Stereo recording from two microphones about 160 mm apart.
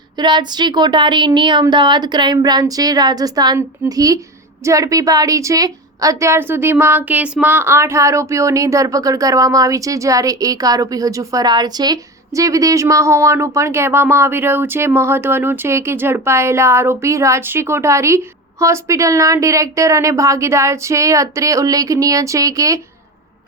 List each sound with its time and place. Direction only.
0.2 s a woman's voice: 30° right (ahead or behind)